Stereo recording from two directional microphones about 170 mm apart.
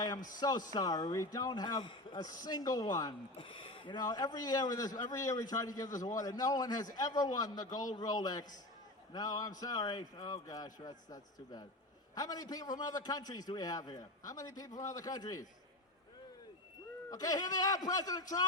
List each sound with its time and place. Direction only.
0.3 s a man's voice: 20° left (ahead or behind)
17.1 s a man's voice: 20° left (ahead or behind)